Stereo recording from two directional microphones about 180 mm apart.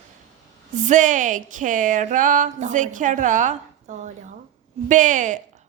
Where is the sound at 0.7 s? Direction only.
45° right (ahead or behind).